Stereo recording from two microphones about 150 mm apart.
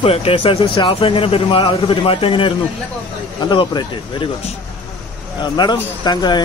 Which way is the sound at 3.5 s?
30° left (ahead or behind).